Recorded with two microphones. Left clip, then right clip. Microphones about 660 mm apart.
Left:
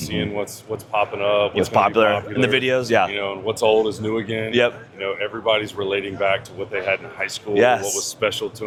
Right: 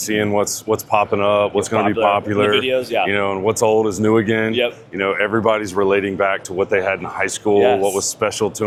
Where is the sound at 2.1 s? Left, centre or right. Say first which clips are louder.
Right 4 dB; right.